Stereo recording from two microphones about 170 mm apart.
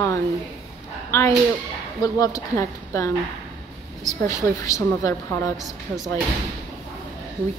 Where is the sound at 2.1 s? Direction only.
20° left (ahead or behind).